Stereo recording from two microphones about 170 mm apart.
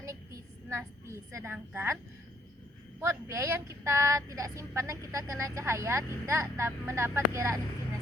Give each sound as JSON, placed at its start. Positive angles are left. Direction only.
{"t": 0.0, "sound": "a sound", "side_deg": -15}
{"t": 1.5, "sound": "speech", "side_deg": -15}
{"t": 3.0, "sound": "speech", "side_deg": -15}